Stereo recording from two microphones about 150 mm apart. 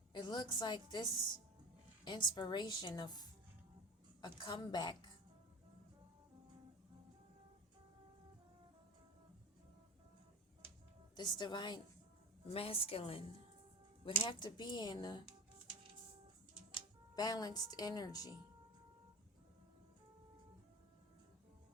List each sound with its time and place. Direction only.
0.1 s a woman's voice: 30° left (ahead or behind)
2.0 s a woman's voice: 30° left (ahead or behind)
11.2 s a woman's voice: 30° left (ahead or behind)
17.2 s a woman's voice: 25° left (ahead or behind)